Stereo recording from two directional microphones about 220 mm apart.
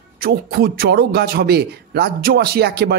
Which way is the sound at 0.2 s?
45° right (ahead or behind).